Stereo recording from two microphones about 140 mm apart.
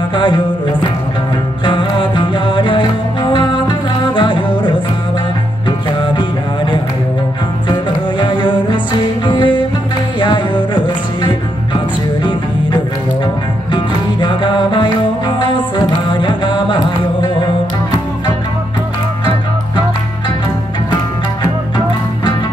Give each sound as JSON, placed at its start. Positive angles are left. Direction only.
{"t": 0.1, "sound": "music", "side_deg": 35}
{"t": 1.6, "sound": "music", "side_deg": 35}
{"t": 12.2, "sound": "music", "side_deg": 35}
{"t": 21.4, "sound": "music", "side_deg": 30}